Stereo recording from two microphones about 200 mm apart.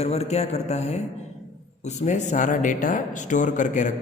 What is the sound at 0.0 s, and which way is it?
Speech, 30° left (ahead or behind).